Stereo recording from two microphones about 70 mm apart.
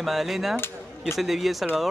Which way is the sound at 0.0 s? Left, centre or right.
Centre.